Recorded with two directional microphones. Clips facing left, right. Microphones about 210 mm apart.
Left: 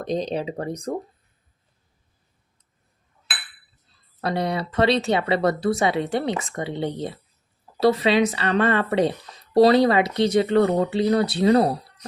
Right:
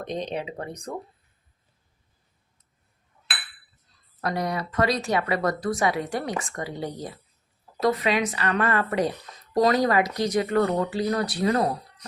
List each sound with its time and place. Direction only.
0.0 s speech: 35° left (ahead or behind)
4.2 s speech: 30° left (ahead or behind)